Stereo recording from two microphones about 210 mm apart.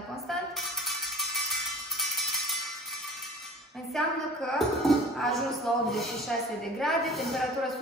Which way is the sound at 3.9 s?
Centre (ahead or behind).